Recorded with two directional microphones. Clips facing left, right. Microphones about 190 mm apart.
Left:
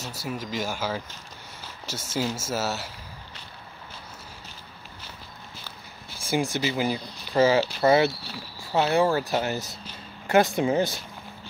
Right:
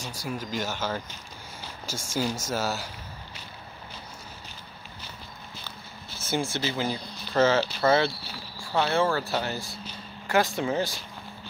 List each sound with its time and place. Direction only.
0.0 s speech: 5° left (ahead or behind)
2.1 s speech: 5° left (ahead or behind)
6.1 s speech: 10° left (ahead or behind)